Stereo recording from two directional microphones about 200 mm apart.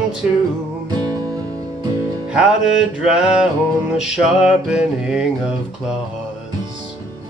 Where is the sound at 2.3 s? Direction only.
5° right (ahead or behind).